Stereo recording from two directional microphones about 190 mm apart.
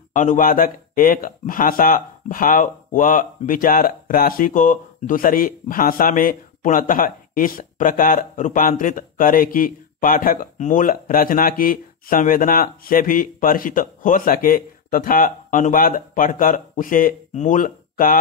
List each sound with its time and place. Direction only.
0.1 s speech: 40° left (ahead or behind)